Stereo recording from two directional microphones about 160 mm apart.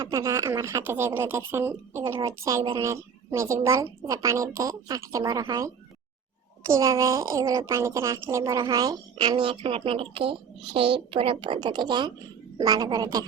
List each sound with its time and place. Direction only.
0.0 s a child's voice: 20° right (ahead or behind)